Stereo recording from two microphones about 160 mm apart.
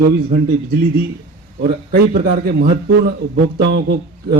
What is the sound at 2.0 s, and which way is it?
Speech, 70° right (ahead or behind).